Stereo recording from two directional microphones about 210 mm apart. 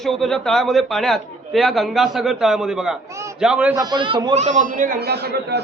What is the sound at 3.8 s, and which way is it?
Speech, 20° right (ahead or behind).